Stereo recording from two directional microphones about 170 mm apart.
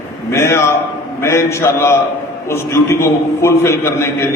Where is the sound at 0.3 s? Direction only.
15° left (ahead or behind).